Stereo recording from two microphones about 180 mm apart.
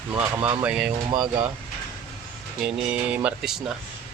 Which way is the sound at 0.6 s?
5° right (ahead or behind).